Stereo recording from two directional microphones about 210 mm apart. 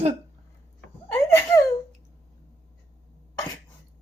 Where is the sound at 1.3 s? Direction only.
15° left (ahead or behind).